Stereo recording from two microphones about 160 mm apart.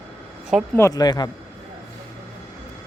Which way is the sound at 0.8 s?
20° left (ahead or behind).